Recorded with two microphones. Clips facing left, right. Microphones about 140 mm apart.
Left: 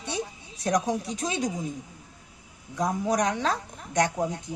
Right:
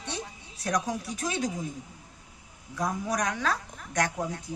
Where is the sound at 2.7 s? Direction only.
20° left (ahead or behind).